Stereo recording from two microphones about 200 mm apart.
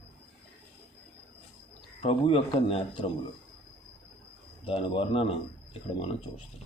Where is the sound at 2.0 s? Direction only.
30° left (ahead or behind).